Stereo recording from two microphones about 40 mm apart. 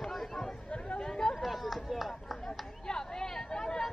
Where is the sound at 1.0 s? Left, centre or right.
Centre.